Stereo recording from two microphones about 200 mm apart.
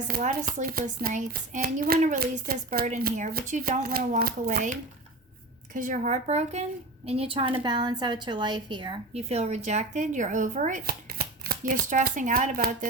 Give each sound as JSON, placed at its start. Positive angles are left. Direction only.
{"t": 0.1, "sound": "a woman's voice", "side_deg": -40}